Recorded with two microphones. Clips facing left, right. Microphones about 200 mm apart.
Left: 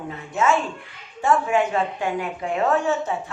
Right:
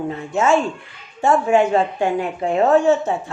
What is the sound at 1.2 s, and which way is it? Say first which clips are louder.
A woman's voice: right 5 dB; 30° right (ahead or behind).